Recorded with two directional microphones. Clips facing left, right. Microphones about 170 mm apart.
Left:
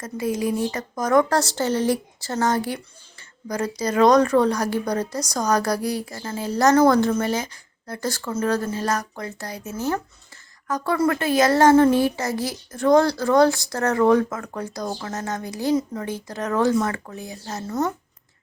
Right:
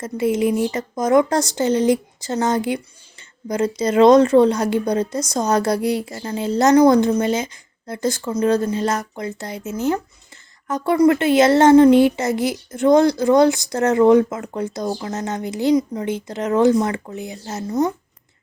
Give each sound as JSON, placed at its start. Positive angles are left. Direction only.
{"t": 0.0, "sound": "speech", "side_deg": -25}